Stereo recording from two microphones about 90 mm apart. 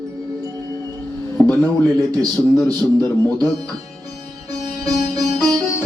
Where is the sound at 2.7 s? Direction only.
45° right (ahead or behind).